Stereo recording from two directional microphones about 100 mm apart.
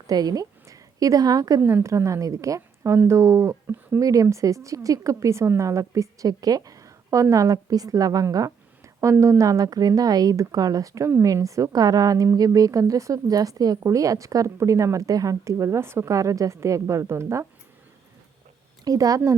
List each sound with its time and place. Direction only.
0.1 s a woman's voice: 40° right (ahead or behind)
1.6 s a woman's voice: 30° right (ahead or behind)
9.1 s speech: 20° right (ahead or behind)
9.4 s a woman's voice: 35° right (ahead or behind)
18.9 s a woman's voice: 35° right (ahead or behind)